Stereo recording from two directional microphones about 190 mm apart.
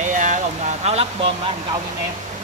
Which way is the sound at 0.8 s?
35° right (ahead or behind).